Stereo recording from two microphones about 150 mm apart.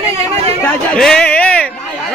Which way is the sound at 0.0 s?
40° right (ahead or behind).